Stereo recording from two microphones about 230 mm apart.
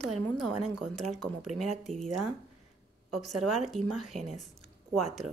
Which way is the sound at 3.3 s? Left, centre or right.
Right.